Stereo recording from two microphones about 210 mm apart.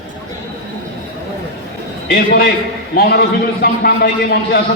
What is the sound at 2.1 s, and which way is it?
A man's voice, 50° left (ahead or behind).